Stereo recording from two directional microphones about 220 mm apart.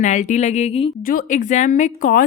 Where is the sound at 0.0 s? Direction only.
35° left (ahead or behind).